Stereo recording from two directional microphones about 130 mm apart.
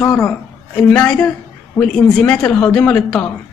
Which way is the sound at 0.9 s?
10° left (ahead or behind).